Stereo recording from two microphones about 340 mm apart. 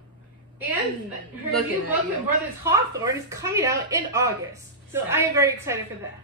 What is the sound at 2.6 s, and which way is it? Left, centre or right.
A woman's voice, centre.